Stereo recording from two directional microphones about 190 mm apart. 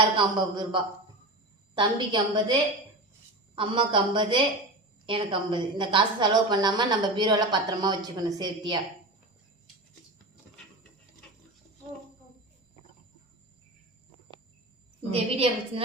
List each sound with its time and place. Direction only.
0.2 s a woman's voice: 25° right (ahead or behind)
15.1 s a woman's voice: 30° right (ahead or behind)